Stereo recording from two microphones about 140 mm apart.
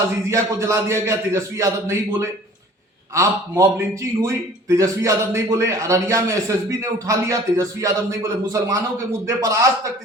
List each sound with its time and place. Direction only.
0.3 s a man's voice: 20° right (ahead or behind)
3.2 s a man's voice: 20° right (ahead or behind)